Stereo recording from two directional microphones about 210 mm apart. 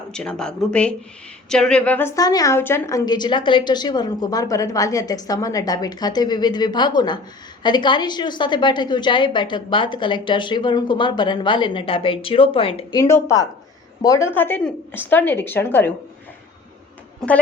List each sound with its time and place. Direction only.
0.1 s a woman's voice: 5° left (ahead or behind)
17.2 s a woman's voice: 5° left (ahead or behind)